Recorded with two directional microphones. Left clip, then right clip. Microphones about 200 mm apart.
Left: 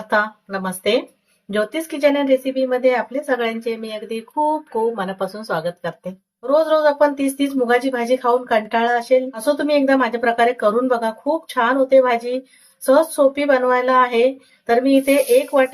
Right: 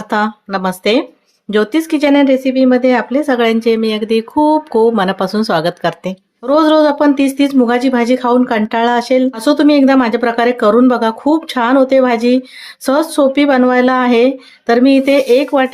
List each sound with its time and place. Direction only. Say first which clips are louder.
0.1 s speech: right 4 dB; 60° right (ahead or behind)